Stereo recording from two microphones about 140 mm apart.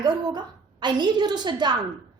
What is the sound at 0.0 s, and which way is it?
A woman's voice, 30° right (ahead or behind).